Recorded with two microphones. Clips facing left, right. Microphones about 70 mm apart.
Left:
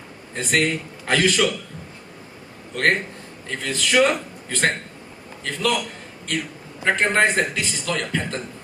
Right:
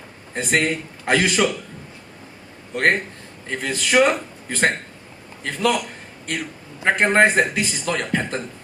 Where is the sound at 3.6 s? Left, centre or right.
Right.